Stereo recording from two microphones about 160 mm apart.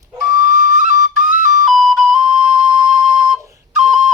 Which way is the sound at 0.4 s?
55° right (ahead or behind).